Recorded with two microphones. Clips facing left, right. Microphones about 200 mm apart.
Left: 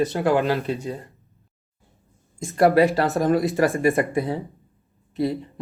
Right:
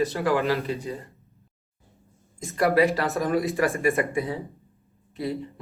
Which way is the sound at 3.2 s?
30° left (ahead or behind).